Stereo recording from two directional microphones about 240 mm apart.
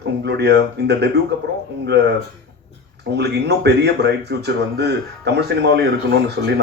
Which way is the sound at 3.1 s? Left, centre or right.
Right.